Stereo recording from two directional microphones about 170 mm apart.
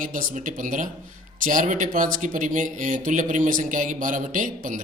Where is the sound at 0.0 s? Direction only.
50° right (ahead or behind).